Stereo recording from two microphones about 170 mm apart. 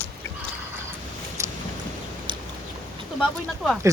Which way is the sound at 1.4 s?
15° right (ahead or behind).